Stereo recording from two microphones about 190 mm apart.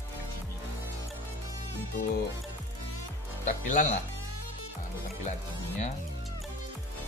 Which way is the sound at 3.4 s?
40° left (ahead or behind).